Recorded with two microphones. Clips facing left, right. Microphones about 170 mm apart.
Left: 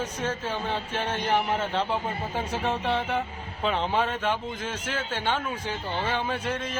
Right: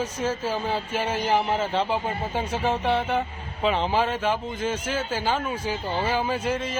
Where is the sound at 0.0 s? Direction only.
5° right (ahead or behind).